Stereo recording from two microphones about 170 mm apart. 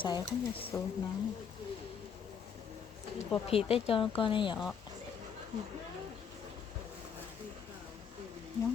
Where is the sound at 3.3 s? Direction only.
35° left (ahead or behind).